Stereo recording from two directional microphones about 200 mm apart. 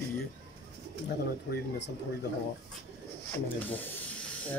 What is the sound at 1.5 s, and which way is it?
Speech, 60° left (ahead or behind).